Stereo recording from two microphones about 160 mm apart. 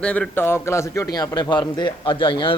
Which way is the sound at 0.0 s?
10° left (ahead or behind).